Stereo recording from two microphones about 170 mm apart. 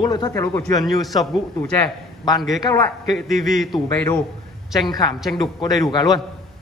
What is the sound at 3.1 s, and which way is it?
Speech, centre (ahead or behind).